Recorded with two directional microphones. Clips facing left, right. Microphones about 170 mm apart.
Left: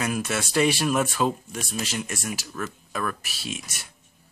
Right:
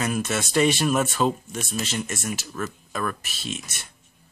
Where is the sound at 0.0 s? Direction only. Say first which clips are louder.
Right 1 dB; centre (ahead or behind).